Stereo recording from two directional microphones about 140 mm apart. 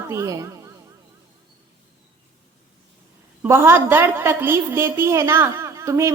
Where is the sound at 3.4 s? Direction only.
20° right (ahead or behind).